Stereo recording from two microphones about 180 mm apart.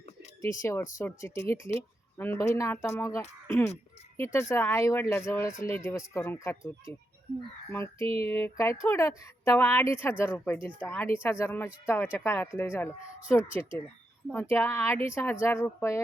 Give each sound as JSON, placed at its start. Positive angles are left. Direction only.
{"t": 0.6, "sound": "speech", "side_deg": 15}
{"t": 7.7, "sound": "speech", "side_deg": 15}